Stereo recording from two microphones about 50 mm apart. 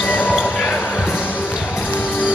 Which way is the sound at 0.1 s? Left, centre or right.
Left.